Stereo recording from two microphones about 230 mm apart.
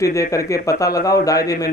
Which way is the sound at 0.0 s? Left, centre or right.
Centre.